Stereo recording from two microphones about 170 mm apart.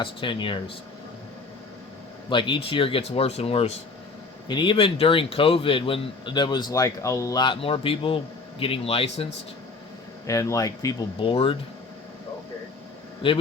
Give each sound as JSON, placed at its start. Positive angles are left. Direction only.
{"t": 0.0, "sound": "speech", "side_deg": 30}
{"t": 2.3, "sound": "speech", "side_deg": 30}
{"t": 10.2, "sound": "speech", "side_deg": 20}
{"t": 11.2, "sound": "speech", "side_deg": 30}
{"t": 13.2, "sound": "speech", "side_deg": 30}